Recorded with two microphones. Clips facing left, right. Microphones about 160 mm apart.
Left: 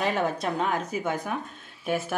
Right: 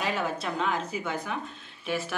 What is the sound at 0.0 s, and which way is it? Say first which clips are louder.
A woman's voice: left 4 dB; 45° left (ahead or behind).